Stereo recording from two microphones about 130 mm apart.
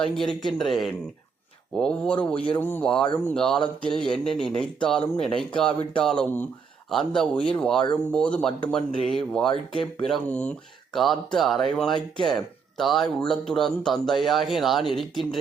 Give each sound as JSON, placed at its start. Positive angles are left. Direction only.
{"t": 0.0, "sound": "speech", "side_deg": 5}